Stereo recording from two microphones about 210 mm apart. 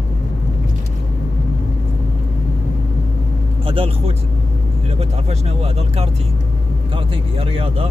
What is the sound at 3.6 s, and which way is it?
Vehicle, 25° right (ahead or behind).